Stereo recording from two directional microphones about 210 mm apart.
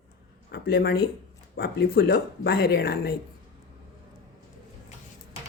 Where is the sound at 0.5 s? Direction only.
50° left (ahead or behind).